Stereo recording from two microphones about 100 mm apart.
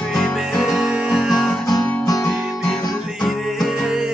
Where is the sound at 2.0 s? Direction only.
40° left (ahead or behind).